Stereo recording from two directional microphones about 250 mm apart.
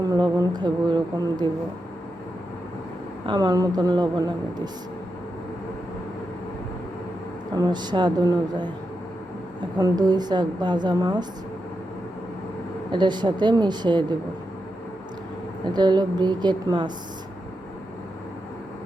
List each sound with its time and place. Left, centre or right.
0.0 s a woman's voice: centre
3.2 s a woman's voice: centre
7.5 s a woman's voice: centre
12.9 s a woman's voice: centre
15.7 s a woman's voice: centre